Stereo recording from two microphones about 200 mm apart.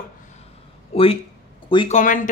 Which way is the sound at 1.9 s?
40° left (ahead or behind).